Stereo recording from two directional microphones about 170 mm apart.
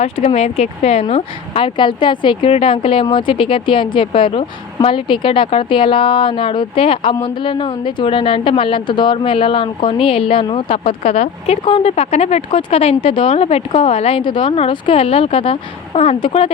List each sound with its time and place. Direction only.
0.0 s a woman's voice: 40° left (ahead or behind)